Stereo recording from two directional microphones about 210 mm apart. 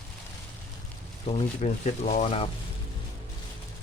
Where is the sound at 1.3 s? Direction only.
35° left (ahead or behind).